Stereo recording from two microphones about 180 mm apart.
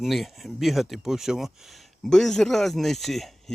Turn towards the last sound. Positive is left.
turn(degrees=0)  # may be behind; listen again after turning